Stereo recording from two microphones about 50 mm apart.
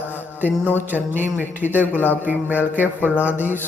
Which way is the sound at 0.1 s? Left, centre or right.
Right.